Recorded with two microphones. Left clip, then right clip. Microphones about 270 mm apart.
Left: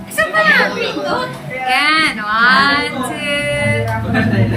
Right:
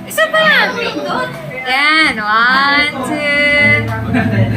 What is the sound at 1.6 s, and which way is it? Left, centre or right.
Female singing, right.